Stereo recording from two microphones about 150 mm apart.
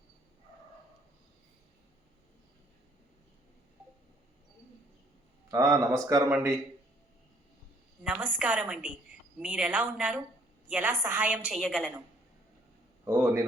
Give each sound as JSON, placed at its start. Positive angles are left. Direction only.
{"t": 5.5, "sound": "a man's voice", "side_deg": -20}
{"t": 8.0, "sound": "a woman's voice", "side_deg": -10}
{"t": 13.1, "sound": "a woman's voice", "side_deg": -15}